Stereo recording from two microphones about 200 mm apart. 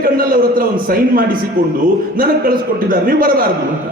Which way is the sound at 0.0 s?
45° right (ahead or behind).